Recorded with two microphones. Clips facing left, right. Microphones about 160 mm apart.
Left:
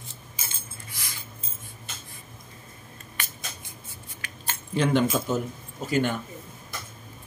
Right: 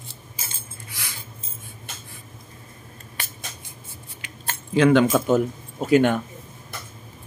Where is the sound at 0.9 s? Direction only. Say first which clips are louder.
Right 4 dB; 70° right (ahead or behind).